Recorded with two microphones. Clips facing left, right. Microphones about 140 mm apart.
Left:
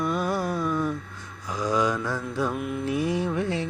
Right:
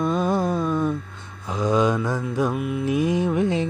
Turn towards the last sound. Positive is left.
turn(degrees=-20)  # may be behind; listen again after turning